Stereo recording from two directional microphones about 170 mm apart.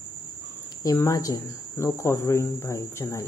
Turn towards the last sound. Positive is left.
turn(degrees=15)  # may be behind; listen again after turning